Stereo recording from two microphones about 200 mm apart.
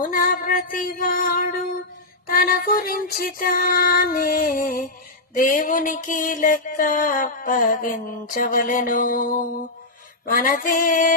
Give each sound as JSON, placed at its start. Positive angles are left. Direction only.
{"t": 0.0, "sound": "music", "side_deg": 45}
{"t": 5.4, "sound": "a sound", "side_deg": 40}
{"t": 8.3, "sound": "music", "side_deg": 45}